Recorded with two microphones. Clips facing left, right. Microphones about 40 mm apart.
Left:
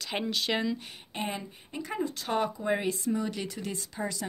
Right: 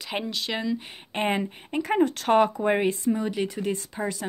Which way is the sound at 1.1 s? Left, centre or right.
Right.